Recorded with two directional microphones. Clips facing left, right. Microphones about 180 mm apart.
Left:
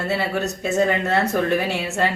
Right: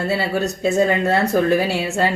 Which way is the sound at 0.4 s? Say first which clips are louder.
Right 4 dB; 30° right (ahead or behind).